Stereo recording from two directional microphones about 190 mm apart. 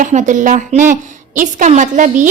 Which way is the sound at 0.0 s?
40° right (ahead or behind).